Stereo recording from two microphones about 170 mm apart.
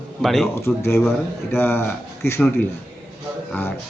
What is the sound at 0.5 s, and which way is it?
A man's voice, 15° left (ahead or behind).